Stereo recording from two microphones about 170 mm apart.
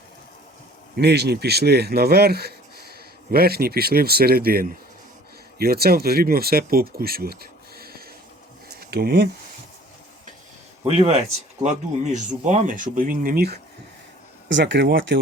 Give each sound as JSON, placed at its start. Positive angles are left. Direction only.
{"t": 0.9, "sound": "speech", "side_deg": -75}
{"t": 8.7, "sound": "a sound", "side_deg": -70}
{"t": 10.8, "sound": "speech", "side_deg": -40}
{"t": 14.5, "sound": "speech", "side_deg": -90}